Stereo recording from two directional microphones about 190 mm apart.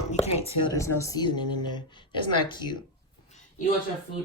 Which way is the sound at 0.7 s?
15° left (ahead or behind).